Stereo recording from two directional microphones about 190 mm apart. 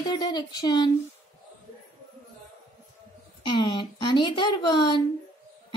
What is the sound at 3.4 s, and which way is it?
A woman's voice, 25° left (ahead or behind).